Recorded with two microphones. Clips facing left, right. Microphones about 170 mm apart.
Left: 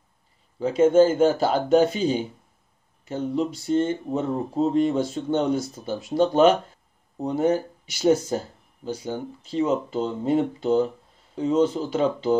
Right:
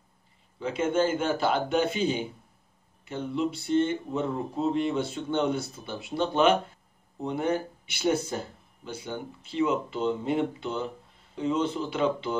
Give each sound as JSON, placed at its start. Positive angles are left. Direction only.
{"t": 0.6, "sound": "speech", "side_deg": 40}